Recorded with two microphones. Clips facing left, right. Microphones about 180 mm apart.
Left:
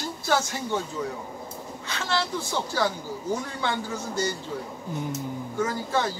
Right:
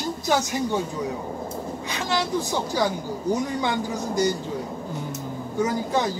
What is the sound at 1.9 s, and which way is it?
Speech, 15° right (ahead or behind).